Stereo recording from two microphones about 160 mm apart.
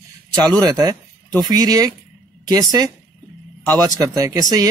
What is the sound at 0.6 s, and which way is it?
Speech, 25° right (ahead or behind).